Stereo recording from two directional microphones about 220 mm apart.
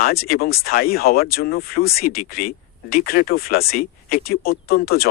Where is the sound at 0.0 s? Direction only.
45° left (ahead or behind).